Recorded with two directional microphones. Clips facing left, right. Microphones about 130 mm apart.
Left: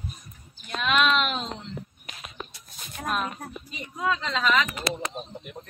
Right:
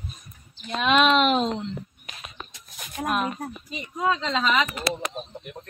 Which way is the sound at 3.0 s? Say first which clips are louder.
Right 3 dB; 10° right (ahead or behind).